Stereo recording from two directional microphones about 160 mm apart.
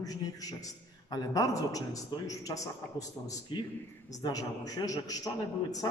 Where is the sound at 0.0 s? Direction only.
25° left (ahead or behind).